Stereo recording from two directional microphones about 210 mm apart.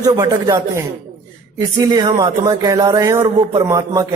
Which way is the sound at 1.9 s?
20° right (ahead or behind).